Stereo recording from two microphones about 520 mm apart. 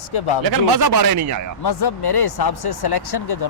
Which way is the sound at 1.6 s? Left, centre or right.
Left.